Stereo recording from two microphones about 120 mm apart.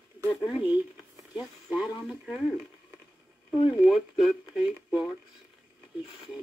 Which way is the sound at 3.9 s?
5° right (ahead or behind).